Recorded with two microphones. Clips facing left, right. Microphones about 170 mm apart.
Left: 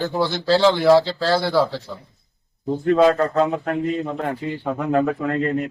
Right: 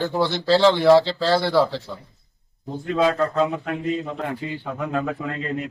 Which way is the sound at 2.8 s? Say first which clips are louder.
Left 4 dB; 50° left (ahead or behind).